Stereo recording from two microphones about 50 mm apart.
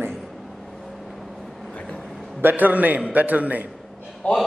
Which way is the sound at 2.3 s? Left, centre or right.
Right.